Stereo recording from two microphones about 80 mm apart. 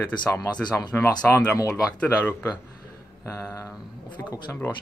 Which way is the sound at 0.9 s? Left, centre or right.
Centre.